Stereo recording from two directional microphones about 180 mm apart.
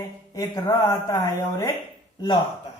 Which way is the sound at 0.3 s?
20° left (ahead or behind).